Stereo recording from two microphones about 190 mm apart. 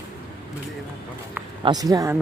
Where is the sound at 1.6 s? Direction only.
20° right (ahead or behind).